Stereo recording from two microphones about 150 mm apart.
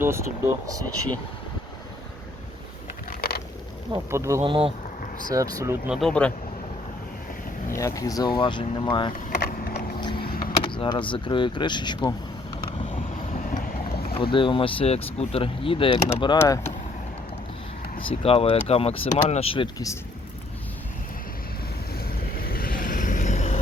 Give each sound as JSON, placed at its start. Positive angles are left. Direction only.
{"t": 0.0, "sound": "speech", "side_deg": -15}
{"t": 3.1, "sound": "a sound", "side_deg": 90}
{"t": 4.1, "sound": "speech", "side_deg": -20}
{"t": 4.4, "sound": "speech", "side_deg": -35}
{"t": 5.3, "sound": "speech", "side_deg": -20}
{"t": 5.9, "sound": "speech", "side_deg": 0}
{"t": 7.7, "sound": "speech", "side_deg": 20}
{"t": 9.3, "sound": "vehicle", "side_deg": 60}
{"t": 10.0, "sound": "vehicle", "side_deg": 30}
{"t": 10.7, "sound": "speech", "side_deg": 30}
{"t": 13.3, "sound": "vehicle", "side_deg": 60}
{"t": 14.1, "sound": "speech", "side_deg": 35}
{"t": 18.1, "sound": "speech", "side_deg": 40}
{"t": 21.9, "sound": "vehicle", "side_deg": 85}